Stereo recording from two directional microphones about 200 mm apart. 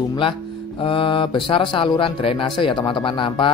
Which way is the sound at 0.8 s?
25° left (ahead or behind).